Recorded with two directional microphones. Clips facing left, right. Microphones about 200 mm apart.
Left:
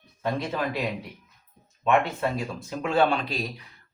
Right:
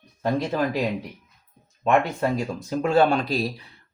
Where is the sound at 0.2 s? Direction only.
40° right (ahead or behind).